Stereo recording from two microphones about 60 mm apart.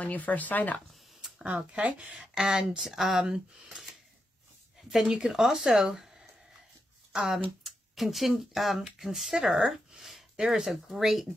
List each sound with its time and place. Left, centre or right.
0.0 s speech: left
1.4 s speech: right
2.3 s speech: centre
7.1 s speech: centre
9.5 s a sound: centre
10.3 s speech: centre